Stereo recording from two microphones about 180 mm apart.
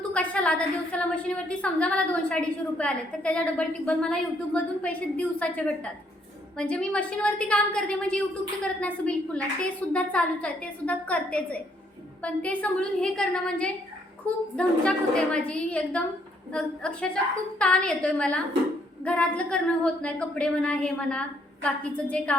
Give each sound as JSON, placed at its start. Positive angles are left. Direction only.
{"t": 0.1, "sound": "a woman's voice", "side_deg": 5}